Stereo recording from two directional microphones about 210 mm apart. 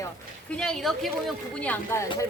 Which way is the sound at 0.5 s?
5° left (ahead or behind).